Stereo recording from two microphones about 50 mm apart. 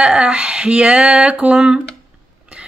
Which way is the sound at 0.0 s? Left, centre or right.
Right.